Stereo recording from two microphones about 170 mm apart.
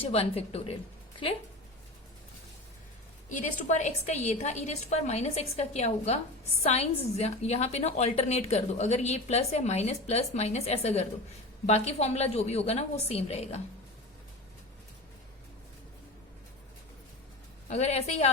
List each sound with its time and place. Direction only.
0.0 s a woman's voice: 35° left (ahead or behind)
3.2 s a woman's voice: 45° left (ahead or behind)
17.7 s a woman's voice: 40° left (ahead or behind)